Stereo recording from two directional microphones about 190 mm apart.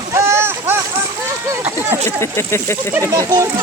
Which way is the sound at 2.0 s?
15° left (ahead or behind).